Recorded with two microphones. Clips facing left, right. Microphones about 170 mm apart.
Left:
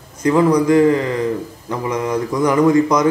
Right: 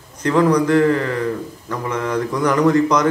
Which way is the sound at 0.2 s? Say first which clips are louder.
Left 2 dB; 10° left (ahead or behind).